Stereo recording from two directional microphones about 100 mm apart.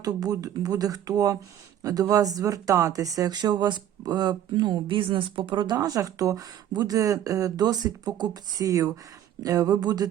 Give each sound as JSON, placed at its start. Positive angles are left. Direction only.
{"t": 0.0, "sound": "speech", "side_deg": -40}